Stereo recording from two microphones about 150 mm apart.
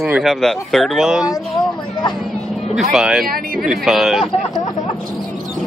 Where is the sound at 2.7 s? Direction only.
5° right (ahead or behind).